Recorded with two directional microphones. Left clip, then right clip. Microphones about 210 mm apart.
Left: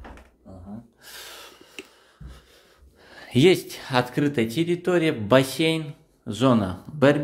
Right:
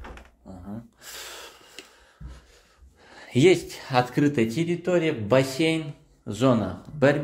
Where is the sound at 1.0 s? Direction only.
10° right (ahead or behind).